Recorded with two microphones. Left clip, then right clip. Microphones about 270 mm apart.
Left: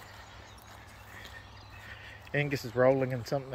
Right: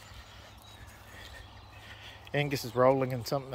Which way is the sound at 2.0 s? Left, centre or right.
Centre.